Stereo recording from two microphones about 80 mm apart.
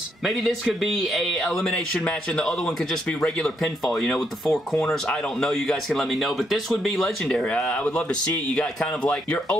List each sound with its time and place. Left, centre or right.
0.2 s speech: centre
2.0 s speech: centre
7.2 s speech: centre